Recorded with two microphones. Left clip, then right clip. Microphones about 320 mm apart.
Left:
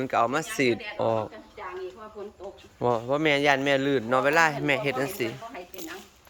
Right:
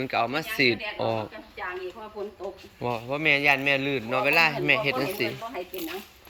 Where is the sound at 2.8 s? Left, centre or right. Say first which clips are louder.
Left 2 dB; centre.